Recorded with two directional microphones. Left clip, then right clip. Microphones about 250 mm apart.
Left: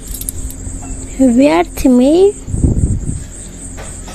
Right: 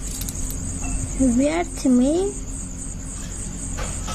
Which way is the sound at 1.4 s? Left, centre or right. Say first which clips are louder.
Left 11 dB; left.